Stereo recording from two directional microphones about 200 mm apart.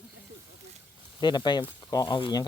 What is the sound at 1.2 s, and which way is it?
Speech, 20° left (ahead or behind).